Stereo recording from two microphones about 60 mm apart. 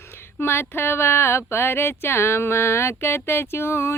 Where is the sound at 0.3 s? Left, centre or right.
Left.